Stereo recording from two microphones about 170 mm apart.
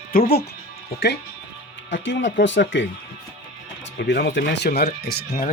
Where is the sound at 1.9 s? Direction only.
90° left.